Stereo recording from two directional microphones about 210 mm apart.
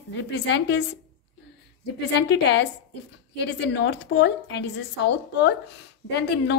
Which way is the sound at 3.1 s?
55° left (ahead or behind).